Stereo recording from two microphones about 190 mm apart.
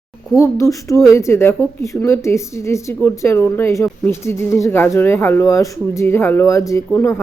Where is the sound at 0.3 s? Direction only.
15° left (ahead or behind).